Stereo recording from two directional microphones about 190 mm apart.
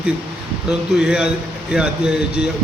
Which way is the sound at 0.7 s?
5° right (ahead or behind).